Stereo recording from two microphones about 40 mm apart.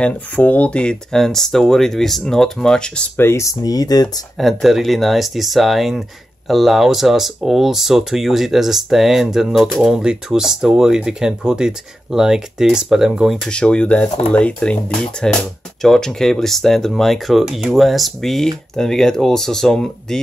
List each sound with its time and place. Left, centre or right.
0.0 s speech: left
1.1 s speech: centre
4.4 s speech: centre; by 13.3 s right
13.5 s speech: left
15.8 s speech: centre